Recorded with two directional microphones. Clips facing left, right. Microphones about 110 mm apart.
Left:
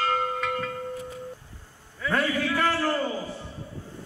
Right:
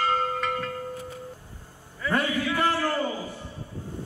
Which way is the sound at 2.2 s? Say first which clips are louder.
Left 1 dB; 15° right (ahead or behind).